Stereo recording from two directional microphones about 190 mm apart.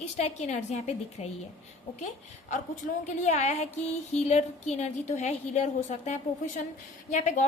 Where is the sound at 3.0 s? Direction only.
40° left (ahead or behind).